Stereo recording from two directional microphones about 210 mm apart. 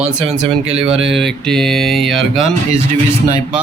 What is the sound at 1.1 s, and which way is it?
Speech, centre (ahead or behind).